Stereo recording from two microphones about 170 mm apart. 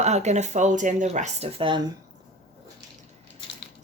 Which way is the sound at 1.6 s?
30° right (ahead or behind).